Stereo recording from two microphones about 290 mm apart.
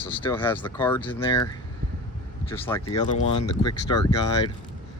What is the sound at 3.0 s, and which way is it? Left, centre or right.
Speech, left.